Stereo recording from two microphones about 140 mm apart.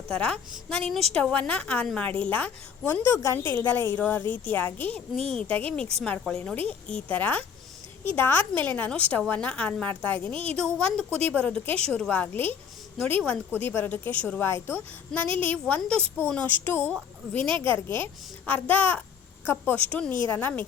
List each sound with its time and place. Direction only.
0.1 s a woman's voice: 5° left (ahead or behind)
10.3 s a woman's voice: 45° right (ahead or behind)
10.8 s a woman's voice: 10° left (ahead or behind)